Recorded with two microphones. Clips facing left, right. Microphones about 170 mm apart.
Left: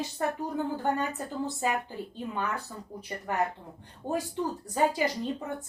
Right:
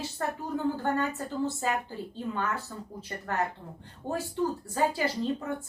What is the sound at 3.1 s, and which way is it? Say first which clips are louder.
Speech: left 2 dB; 15° left (ahead or behind).